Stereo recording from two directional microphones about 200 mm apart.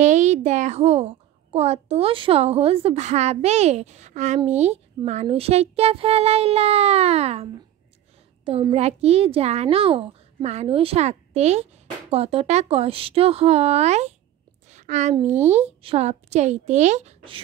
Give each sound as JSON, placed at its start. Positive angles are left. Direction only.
{"t": 0.0, "sound": "a child's voice", "side_deg": -35}
{"t": 8.5, "sound": "a child's voice", "side_deg": -30}
{"t": 14.7, "sound": "a sound", "side_deg": -35}
{"t": 15.2, "sound": "a child's voice", "side_deg": -35}